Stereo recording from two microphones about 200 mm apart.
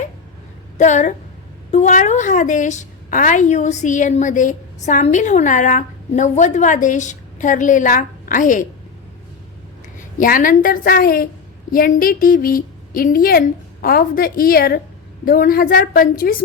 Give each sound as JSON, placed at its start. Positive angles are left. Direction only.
{"t": 0.8, "sound": "a woman's voice", "side_deg": 35}
{"t": 10.2, "sound": "a woman's voice", "side_deg": 45}